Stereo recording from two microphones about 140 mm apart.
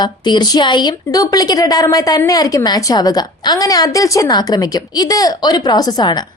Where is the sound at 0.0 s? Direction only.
30° left (ahead or behind).